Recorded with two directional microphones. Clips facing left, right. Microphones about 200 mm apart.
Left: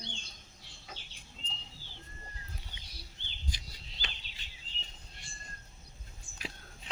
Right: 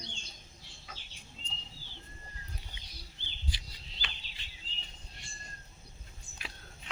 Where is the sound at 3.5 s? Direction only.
45° left (ahead or behind).